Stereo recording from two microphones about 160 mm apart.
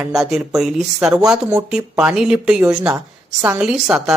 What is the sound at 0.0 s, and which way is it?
Speech, centre (ahead or behind).